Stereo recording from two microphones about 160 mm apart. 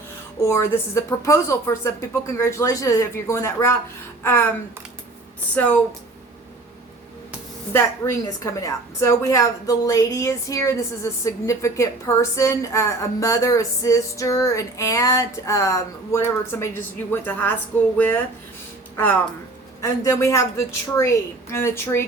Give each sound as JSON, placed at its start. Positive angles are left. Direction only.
{"t": 0.4, "sound": "a woman's voice", "side_deg": 15}
{"t": 5.5, "sound": "a woman's voice", "side_deg": 10}
{"t": 7.7, "sound": "a woman's voice", "side_deg": 15}
{"t": 19.8, "sound": "a woman's voice", "side_deg": 15}